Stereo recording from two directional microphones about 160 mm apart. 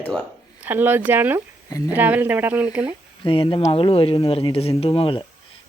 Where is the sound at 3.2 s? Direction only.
30° left (ahead or behind).